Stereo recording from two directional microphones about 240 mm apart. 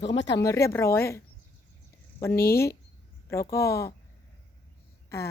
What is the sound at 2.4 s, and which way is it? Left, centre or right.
Speech, left.